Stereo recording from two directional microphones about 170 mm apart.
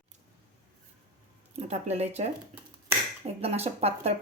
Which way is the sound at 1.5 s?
40° right (ahead or behind).